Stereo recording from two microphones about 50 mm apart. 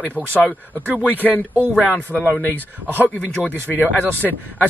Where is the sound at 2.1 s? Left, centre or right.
Centre.